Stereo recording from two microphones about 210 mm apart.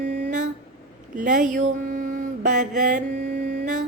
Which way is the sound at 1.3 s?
40° right (ahead or behind).